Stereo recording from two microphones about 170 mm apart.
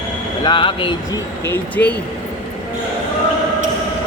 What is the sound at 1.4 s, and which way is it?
Speech, 10° left (ahead or behind).